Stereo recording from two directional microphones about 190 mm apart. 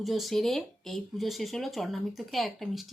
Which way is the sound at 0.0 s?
Centre (ahead or behind).